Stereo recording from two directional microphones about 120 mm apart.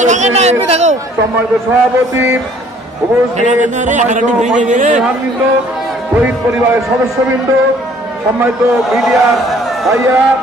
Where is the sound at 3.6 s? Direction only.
90° right.